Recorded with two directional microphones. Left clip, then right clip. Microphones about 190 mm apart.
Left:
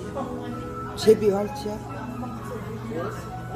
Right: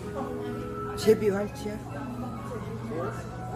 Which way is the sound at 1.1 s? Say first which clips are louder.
Left 5 dB; centre (ahead or behind).